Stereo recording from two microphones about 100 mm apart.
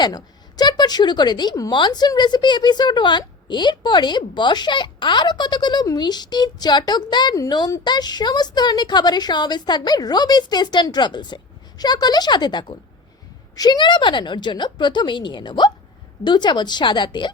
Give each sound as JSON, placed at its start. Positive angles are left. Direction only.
{"t": 0.0, "sound": "speech", "side_deg": 45}